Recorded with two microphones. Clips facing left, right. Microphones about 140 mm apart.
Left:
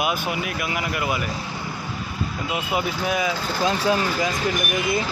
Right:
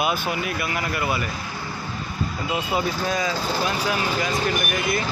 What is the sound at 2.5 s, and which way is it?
Speech, 10° left (ahead or behind).